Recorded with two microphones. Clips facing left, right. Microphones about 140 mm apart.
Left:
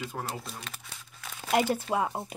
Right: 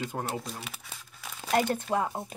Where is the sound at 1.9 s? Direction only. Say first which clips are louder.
Right 1 dB; 5° left (ahead or behind).